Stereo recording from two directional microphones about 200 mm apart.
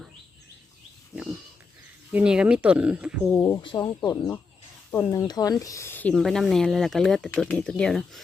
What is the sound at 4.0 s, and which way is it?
Speech, 10° left (ahead or behind).